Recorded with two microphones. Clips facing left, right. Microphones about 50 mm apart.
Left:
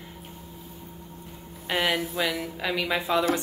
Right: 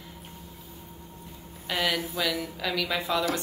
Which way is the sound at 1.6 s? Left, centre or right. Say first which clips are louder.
Left 2 dB; left.